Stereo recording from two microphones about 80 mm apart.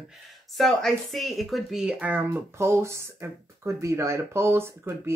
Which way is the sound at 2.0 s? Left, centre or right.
Centre.